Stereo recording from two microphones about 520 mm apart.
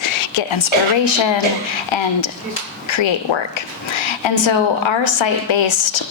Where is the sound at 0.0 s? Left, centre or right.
Left.